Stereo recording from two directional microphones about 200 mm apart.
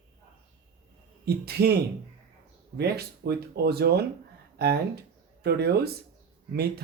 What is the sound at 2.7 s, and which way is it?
Speech, 55° right (ahead or behind).